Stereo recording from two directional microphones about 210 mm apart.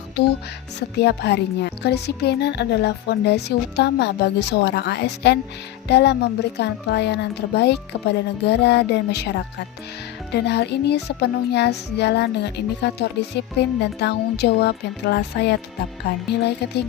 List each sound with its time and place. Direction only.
0.2 s music: 50° left (ahead or behind)